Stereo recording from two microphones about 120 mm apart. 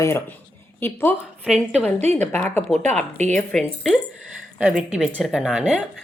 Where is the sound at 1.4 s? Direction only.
5° right (ahead or behind).